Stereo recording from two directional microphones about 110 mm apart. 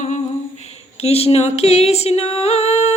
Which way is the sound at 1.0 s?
70° left (ahead or behind).